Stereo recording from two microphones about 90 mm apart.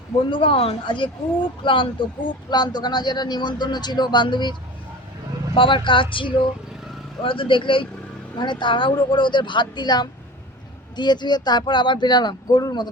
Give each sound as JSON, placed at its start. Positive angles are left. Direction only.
{"t": 0.3, "sound": "speech", "side_deg": 75}
{"t": 5.5, "sound": "speech", "side_deg": 70}
{"t": 8.4, "sound": "speech", "side_deg": 60}